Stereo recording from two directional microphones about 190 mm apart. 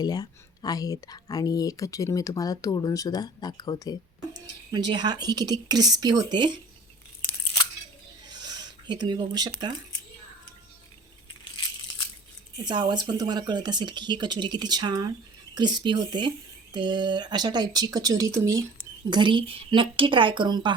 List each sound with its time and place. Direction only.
0.0 s speech: 20° left (ahead or behind)
4.4 s speech: 20° right (ahead or behind)
8.3 s a sound: 20° right (ahead or behind)
12.6 s speech: 20° right (ahead or behind)